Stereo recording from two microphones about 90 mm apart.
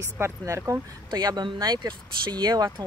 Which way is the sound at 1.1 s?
50° right (ahead or behind).